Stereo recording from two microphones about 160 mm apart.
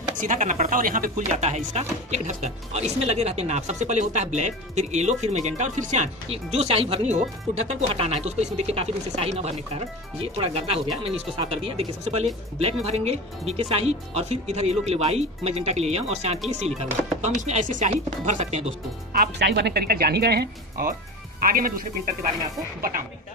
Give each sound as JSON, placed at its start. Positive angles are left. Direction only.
{"t": 0.2, "sound": "speech", "side_deg": -55}
{"t": 1.3, "sound": "speech", "side_deg": -45}
{"t": 19.3, "sound": "speech", "side_deg": -90}